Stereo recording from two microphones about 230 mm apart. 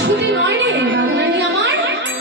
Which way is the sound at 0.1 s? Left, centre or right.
Right.